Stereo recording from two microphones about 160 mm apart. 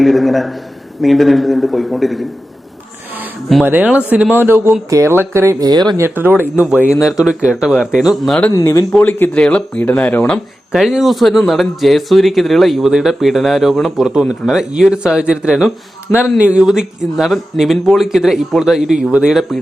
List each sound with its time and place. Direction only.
0.0 s speech: centre (ahead or behind)
3.5 s speech: 10° right (ahead or behind); by 5.9 s 25° right (ahead or behind)
6.0 s speech: 10° right (ahead or behind); by 8.5 s 5° left (ahead or behind)
8.5 s speech: 20° left (ahead or behind)
10.7 s speech: 5° right (ahead or behind)